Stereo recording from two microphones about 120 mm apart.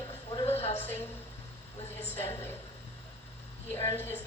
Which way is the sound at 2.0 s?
20° left (ahead or behind).